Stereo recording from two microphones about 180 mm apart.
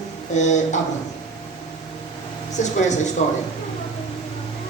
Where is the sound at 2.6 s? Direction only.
40° left (ahead or behind).